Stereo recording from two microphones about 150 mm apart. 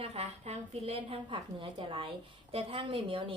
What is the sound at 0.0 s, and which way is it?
A woman's voice, 45° right (ahead or behind).